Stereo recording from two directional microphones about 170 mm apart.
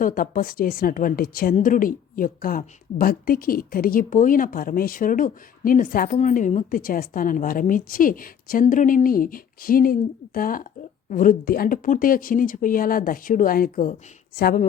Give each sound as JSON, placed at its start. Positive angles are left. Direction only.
{"t": 0.0, "sound": "a woman's voice", "side_deg": 55}